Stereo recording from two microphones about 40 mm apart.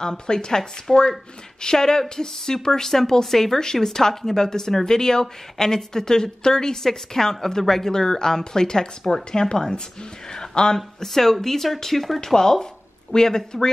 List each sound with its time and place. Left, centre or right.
0.0 s a woman's voice: centre